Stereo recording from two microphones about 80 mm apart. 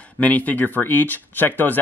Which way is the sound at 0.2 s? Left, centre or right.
Centre.